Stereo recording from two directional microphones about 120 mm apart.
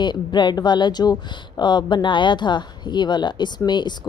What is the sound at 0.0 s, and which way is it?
Speech, 40° left (ahead or behind).